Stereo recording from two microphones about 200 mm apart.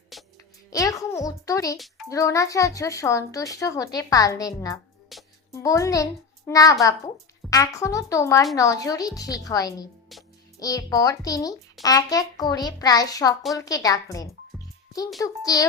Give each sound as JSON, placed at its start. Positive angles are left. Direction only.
{"t": 0.1, "sound": "music", "side_deg": 0}
{"t": 0.7, "sound": "speech", "side_deg": 15}
{"t": 5.1, "sound": "music", "side_deg": 0}
{"t": 5.5, "sound": "a child's voice", "side_deg": 15}